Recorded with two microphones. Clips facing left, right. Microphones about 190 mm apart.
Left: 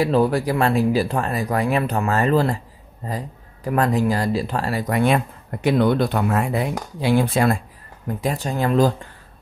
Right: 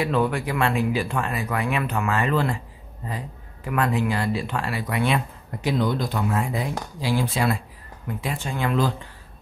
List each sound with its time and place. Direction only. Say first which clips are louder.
0.0 s speech: left 5 dB; 35° left (ahead or behind)